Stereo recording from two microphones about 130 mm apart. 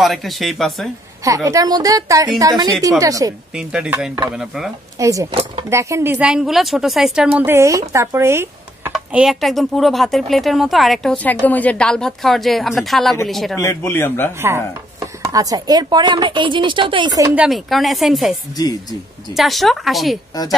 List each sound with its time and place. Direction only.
0.0 s speech: centre (ahead or behind)
1.2 s a woman's voice: 25° right (ahead or behind)
3.5 s speech: 5° right (ahead or behind)
4.9 s a woman's voice: 25° right (ahead or behind)
6.1 s speech: 5° right (ahead or behind)
7.4 s a woman's voice: 20° right (ahead or behind)
9.1 s speech: 5° right (ahead or behind)
13.6 s a man's voice: 20° left (ahead or behind)
15.0 s speech: 25° right (ahead or behind)
17.4 s speech: centre (ahead or behind)
18.6 s a man's voice: 30° left (ahead or behind)
19.3 s speech: centre (ahead or behind)